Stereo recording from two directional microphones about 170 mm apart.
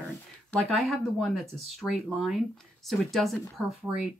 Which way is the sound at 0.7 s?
Centre (ahead or behind).